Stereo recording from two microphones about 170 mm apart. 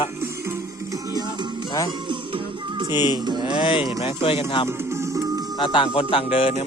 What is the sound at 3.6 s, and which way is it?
Speech, 30° left (ahead or behind).